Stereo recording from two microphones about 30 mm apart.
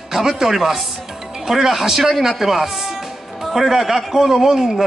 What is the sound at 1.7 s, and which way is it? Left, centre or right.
Speech, centre.